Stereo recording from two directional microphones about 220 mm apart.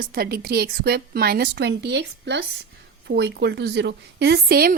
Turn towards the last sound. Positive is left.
turn(degrees=-45)  # may be behind; listen again after turning